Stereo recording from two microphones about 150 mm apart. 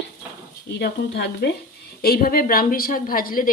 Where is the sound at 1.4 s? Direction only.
90° left.